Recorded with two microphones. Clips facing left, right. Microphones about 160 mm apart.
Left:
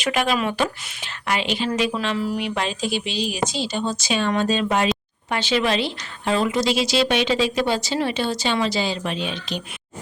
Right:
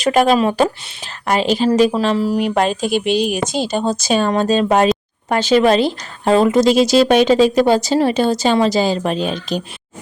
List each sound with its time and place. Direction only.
0.0 s speech: 40° right (ahead or behind)